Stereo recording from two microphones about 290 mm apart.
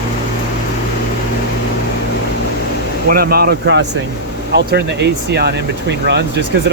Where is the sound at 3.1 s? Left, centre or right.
Right.